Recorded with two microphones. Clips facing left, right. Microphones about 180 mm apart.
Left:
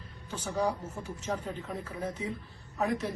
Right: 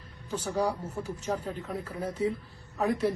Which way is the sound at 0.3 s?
10° right (ahead or behind).